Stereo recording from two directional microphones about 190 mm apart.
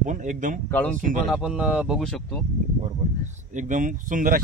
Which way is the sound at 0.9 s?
45° right (ahead or behind).